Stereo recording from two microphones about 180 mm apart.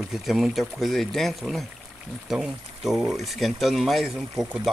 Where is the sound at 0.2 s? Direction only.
Centre (ahead or behind).